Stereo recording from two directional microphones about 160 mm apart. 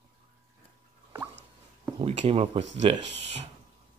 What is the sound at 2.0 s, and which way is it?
Speech, 40° right (ahead or behind).